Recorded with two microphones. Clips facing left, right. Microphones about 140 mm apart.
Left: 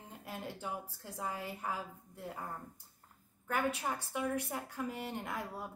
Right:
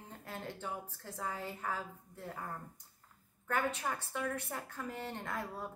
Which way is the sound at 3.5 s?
10° left (ahead or behind).